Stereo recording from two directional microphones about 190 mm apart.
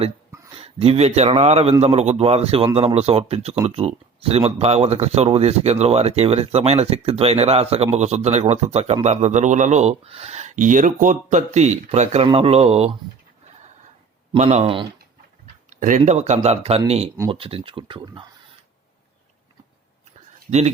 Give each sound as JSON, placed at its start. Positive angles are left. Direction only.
{"t": 0.5, "sound": "speech", "side_deg": -30}
{"t": 14.3, "sound": "speech", "side_deg": -35}
{"t": 15.7, "sound": "speech", "side_deg": -40}